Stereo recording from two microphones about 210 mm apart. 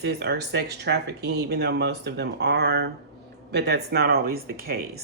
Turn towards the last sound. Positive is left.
turn(degrees=-45)  # may be behind; listen again after turning